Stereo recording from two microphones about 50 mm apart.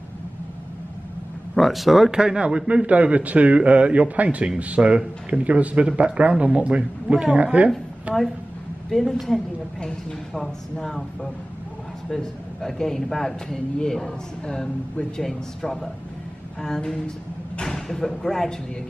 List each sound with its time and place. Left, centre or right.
1.5 s speech: centre
2.0 s a man's voice: centre
8.9 s a woman's voice: centre
12.1 s a man's voice: centre